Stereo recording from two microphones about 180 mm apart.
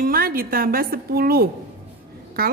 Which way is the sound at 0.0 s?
55° right (ahead or behind).